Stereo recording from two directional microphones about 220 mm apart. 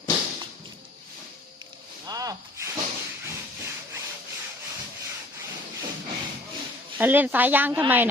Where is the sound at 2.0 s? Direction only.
15° right (ahead or behind).